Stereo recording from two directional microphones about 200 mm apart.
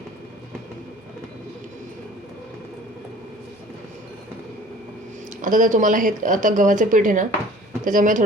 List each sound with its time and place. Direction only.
5.4 s speech: 40° right (ahead or behind)